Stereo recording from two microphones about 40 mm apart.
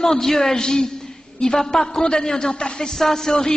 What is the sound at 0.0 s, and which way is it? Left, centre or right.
A woman's voice, centre.